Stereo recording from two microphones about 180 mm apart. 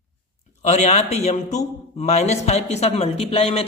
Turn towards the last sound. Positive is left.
turn(degrees=35)  # may be behind; listen again after turning